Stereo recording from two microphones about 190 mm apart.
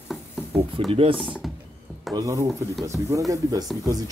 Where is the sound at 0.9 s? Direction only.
30° right (ahead or behind).